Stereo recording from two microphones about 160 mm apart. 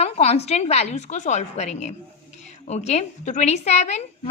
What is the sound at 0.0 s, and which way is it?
A woman's voice, 40° left (ahead or behind).